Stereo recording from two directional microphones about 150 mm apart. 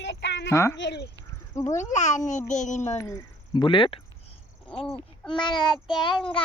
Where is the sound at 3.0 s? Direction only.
20° left (ahead or behind).